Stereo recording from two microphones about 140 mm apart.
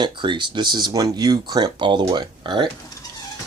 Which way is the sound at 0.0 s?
35° right (ahead or behind).